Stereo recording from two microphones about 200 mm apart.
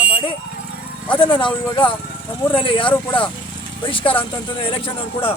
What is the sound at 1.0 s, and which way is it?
Speech, 25° left (ahead or behind).